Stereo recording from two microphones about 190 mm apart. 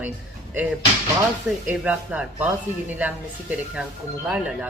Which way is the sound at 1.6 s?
10° right (ahead or behind).